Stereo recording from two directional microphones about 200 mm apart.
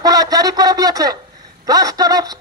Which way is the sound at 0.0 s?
20° right (ahead or behind).